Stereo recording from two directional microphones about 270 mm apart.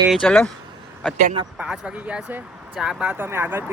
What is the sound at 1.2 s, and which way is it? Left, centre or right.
Speech, right.